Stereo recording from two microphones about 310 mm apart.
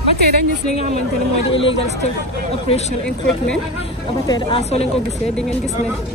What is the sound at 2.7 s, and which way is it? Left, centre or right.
Speech, centre.